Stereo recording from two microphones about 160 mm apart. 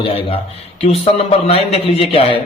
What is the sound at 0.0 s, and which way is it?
A man's voice, 35° left (ahead or behind).